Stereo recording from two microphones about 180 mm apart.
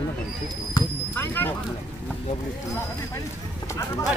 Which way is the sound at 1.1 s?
10° left (ahead or behind).